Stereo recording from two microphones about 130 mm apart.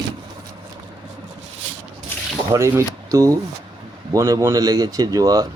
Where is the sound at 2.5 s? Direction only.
20° right (ahead or behind).